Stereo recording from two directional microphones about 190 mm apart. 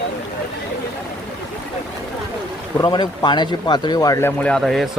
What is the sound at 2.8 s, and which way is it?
Speech, 25° left (ahead or behind).